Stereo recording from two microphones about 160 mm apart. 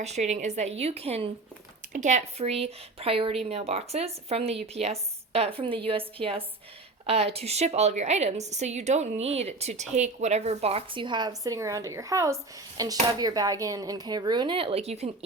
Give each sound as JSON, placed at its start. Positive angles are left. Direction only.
{"t": 0.0, "sound": "a woman's voice", "side_deg": -45}
{"t": 1.9, "sound": "a woman's voice", "side_deg": -50}